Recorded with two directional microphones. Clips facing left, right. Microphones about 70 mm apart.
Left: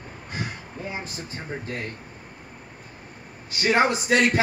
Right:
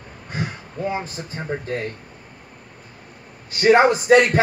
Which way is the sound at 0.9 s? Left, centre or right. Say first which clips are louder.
Right 6 dB; right.